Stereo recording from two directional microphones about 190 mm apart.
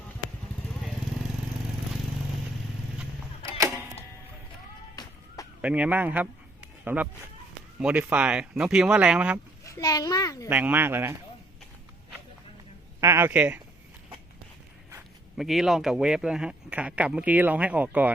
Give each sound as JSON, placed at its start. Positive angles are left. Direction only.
{"t": 5.0, "sound": "a sound", "side_deg": 20}
{"t": 5.6, "sound": "a man's voice", "side_deg": -5}
{"t": 9.6, "sound": "a child's voice", "side_deg": 15}
{"t": 10.5, "sound": "speech", "side_deg": -10}
{"t": 13.0, "sound": "speech", "side_deg": -15}
{"t": 15.4, "sound": "speech", "side_deg": 0}